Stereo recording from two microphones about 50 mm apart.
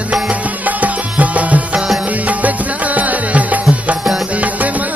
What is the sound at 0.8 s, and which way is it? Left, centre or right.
Music, right.